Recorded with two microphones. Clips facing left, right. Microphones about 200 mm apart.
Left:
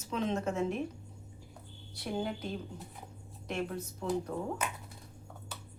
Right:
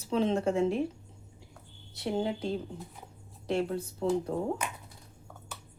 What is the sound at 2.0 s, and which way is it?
A woman's voice, 25° right (ahead or behind).